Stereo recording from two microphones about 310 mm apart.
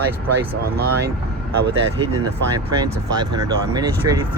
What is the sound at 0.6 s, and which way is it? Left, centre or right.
Speech, right.